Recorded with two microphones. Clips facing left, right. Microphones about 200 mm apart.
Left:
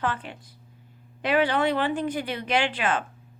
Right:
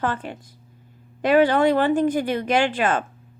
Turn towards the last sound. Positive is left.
turn(degrees=-45)  # may be behind; listen again after turning